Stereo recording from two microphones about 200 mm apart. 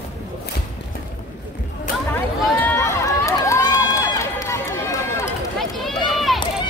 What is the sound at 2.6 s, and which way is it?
Run, 15° left (ahead or behind).